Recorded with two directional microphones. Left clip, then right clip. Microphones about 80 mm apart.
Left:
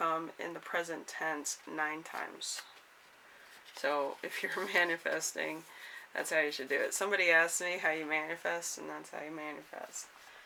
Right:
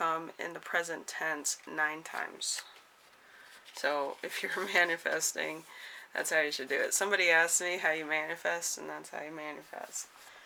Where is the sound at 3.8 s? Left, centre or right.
Right.